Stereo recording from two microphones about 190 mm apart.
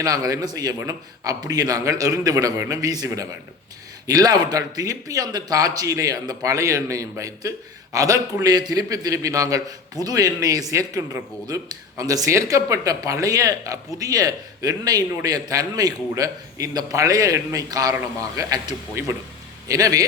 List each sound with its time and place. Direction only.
0.0 s a man's voice: 20° right (ahead or behind)